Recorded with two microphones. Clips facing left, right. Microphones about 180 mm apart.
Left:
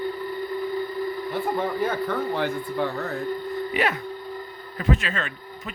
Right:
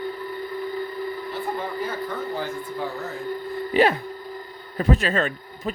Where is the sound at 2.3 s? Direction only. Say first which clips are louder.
Left 3 dB; 65° left (ahead or behind).